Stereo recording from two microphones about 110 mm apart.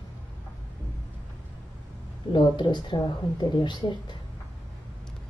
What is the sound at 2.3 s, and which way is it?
Speech, 45° left (ahead or behind).